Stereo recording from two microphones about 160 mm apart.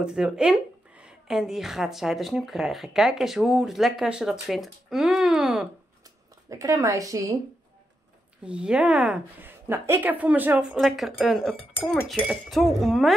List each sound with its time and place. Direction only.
0.0 s speech: 5° right (ahead or behind)
6.5 s a woman's voice: 20° right (ahead or behind)
8.5 s speech: 5° right (ahead or behind)